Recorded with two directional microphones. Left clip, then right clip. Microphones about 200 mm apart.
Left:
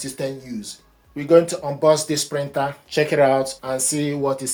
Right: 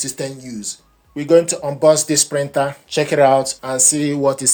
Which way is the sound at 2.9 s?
20° right (ahead or behind).